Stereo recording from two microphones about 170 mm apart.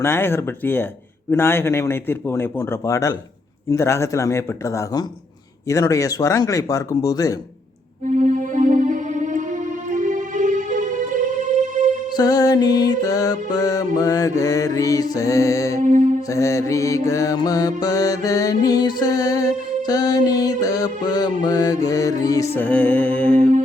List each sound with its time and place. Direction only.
0.0 s speech: 15° left (ahead or behind)
5.6 s mantra: 20° left (ahead or behind)
8.2 s music: 50° right (ahead or behind)
12.1 s mantra: 20° left (ahead or behind)
15.8 s mantra: 50° right (ahead or behind)
16.3 s mantra: 20° left (ahead or behind)
22.6 s speech: 10° left (ahead or behind)